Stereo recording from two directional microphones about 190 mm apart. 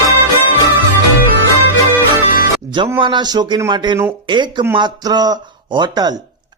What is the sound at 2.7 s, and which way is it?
Music, 25° right (ahead or behind).